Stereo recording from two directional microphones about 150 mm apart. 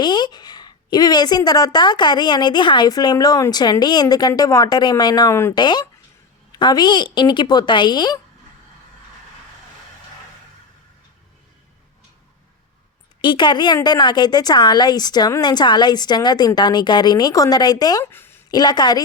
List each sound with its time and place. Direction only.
0.0 s a woman's voice: 30° left (ahead or behind)
5.5 s a woman's voice: 30° left (ahead or behind)
13.2 s a woman's voice: 30° left (ahead or behind)
18.0 s speech: 15° left (ahead or behind)
18.5 s a woman's voice: 30° left (ahead or behind)